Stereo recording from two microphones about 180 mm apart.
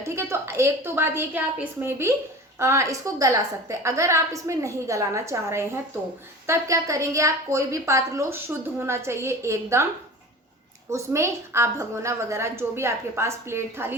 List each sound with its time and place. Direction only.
0.0 s a woman's voice: 15° right (ahead or behind)
10.8 s a woman's voice: 15° right (ahead or behind)